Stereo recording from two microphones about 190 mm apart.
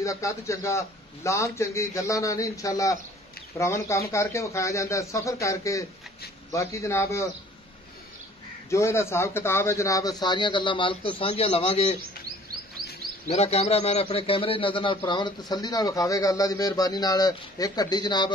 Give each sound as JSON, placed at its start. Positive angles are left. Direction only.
{"t": 0.0, "sound": "a man's voice", "side_deg": 15}
{"t": 8.6, "sound": "a man's voice", "side_deg": 15}
{"t": 13.3, "sound": "a man's voice", "side_deg": 35}